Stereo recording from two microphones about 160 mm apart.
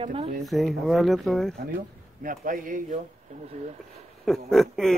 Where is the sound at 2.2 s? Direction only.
55° right (ahead or behind).